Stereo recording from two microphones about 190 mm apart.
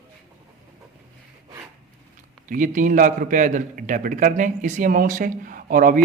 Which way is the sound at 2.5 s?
45° right (ahead or behind).